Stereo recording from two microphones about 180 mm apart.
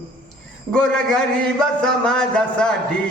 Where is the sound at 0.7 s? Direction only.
5° left (ahead or behind).